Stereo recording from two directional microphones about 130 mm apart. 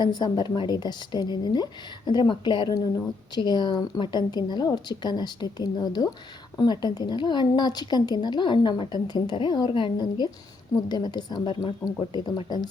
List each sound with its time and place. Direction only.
0.0 s a woman's voice: 30° left (ahead or behind)